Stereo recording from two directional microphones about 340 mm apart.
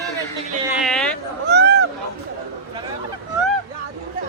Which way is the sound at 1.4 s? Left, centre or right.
Right.